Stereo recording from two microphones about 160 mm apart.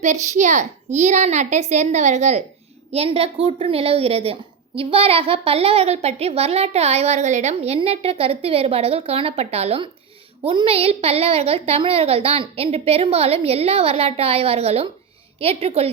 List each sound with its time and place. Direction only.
0.0 s a child's voice: 45° right (ahead or behind)